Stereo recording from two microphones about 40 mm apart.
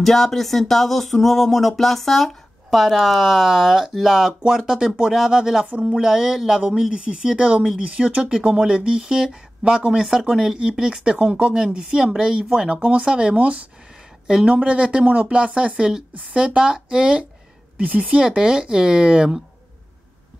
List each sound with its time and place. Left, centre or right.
0.0 s a sound: centre
2.7 s speech: centre
5.7 s speech: right
5.9 s speech: centre
6.9 s a woman's voice: centre